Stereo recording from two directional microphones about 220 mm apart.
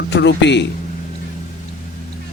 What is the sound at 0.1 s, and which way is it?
Speech, 50° left (ahead or behind).